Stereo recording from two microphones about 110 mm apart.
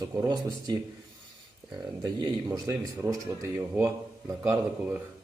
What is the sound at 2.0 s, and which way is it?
Speech, 40° right (ahead or behind).